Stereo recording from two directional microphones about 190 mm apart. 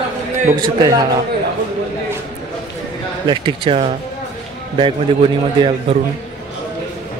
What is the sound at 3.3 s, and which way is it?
Speech, 25° right (ahead or behind).